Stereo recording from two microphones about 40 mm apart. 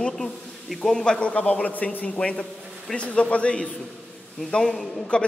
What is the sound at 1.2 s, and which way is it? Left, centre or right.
Speech, left.